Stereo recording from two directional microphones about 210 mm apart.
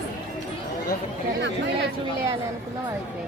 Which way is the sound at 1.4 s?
55° right (ahead or behind).